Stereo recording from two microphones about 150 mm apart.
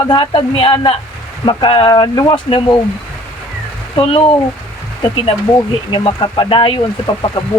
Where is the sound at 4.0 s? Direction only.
40° left (ahead or behind).